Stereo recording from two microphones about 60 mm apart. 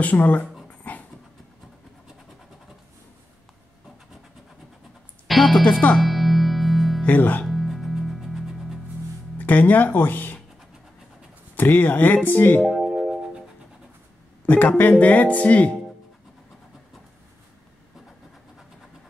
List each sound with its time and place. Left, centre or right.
0.0 s speech: left
5.3 s music: centre
7.1 s speech: left
7.4 s music: centre
9.4 s speech: left
11.5 s speech: left
12.6 s music: centre
14.4 s speech: left